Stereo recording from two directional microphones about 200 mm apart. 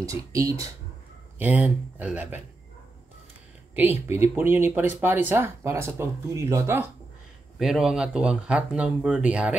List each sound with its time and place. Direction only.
0.0 s speech: 15° right (ahead or behind)
3.7 s speech: 10° right (ahead or behind)
7.5 s speech: centre (ahead or behind)